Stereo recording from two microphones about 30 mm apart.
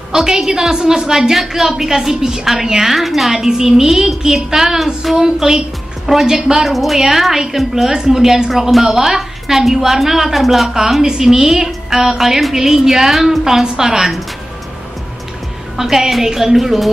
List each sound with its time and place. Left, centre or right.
0.1 s a woman's voice: centre
1.3 s a woman's voice: centre
3.4 s a woman's voice: centre
6.7 s a woman's voice: centre
8.5 s a woman's voice: centre
11.0 s a woman's voice: centre
15.8 s a woman's voice: centre